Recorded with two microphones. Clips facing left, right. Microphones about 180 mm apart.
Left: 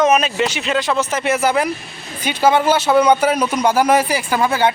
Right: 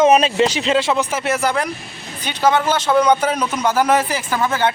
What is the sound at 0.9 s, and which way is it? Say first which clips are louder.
Speech: left 1 dB; 15° right (ahead or behind).